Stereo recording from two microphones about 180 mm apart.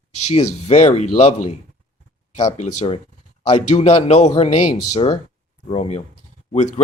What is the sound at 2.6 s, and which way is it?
Speech, 35° left (ahead or behind).